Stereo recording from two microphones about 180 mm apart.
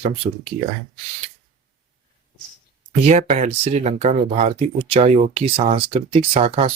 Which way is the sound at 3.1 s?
40° right (ahead or behind).